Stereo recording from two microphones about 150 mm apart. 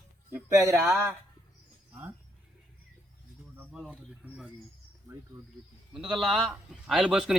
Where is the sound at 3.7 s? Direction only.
5° right (ahead or behind).